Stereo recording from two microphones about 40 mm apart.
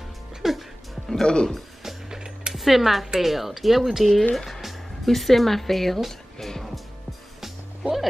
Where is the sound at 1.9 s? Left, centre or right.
Centre.